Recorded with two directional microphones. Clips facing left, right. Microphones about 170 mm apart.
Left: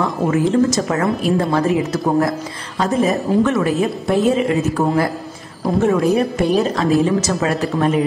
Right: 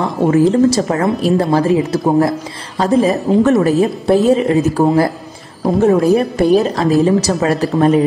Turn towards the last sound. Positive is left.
turn(degrees=-40)  # may be behind; listen again after turning